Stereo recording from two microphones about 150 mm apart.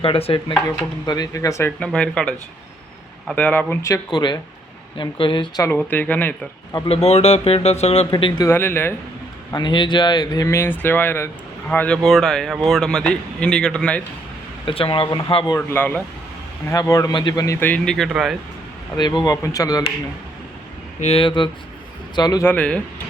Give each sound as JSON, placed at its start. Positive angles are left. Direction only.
{"t": 0.0, "sound": "speech", "side_deg": 40}
{"t": 1.8, "sound": "speech", "side_deg": 5}
{"t": 5.7, "sound": "speech", "side_deg": 10}
{"t": 6.8, "sound": "speech", "side_deg": 45}
{"t": 8.1, "sound": "speech", "side_deg": 30}
{"t": 8.4, "sound": "speech", "side_deg": 15}
{"t": 9.5, "sound": "speech", "side_deg": 30}
{"t": 14.6, "sound": "speech", "side_deg": 35}
{"t": 15.5, "sound": "speech", "side_deg": 15}
{"t": 17.6, "sound": "speech", "side_deg": 10}
{"t": 18.9, "sound": "speech", "side_deg": 30}
{"t": 21.0, "sound": "speech", "side_deg": 40}
{"t": 22.4, "sound": "speech", "side_deg": 10}